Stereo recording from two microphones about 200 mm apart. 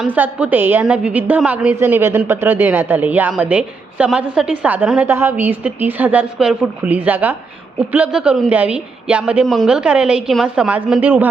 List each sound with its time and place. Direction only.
0.0 s a woman's voice: 5° right (ahead or behind)